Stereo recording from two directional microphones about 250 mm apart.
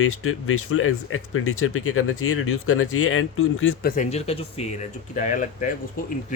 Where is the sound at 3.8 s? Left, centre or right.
Left.